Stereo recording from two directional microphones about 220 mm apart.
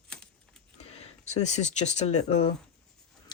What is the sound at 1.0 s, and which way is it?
Speech, 30° left (ahead or behind).